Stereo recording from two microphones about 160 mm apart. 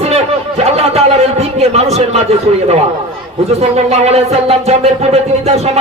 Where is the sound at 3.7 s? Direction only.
40° right (ahead or behind).